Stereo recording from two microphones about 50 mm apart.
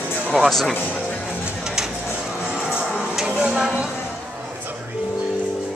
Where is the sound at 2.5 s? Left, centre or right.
Right.